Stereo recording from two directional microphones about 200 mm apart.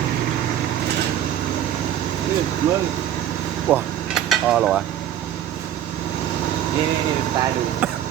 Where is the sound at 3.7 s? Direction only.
Centre (ahead or behind).